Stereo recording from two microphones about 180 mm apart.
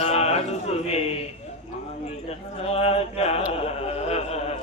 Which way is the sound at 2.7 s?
35° left (ahead or behind).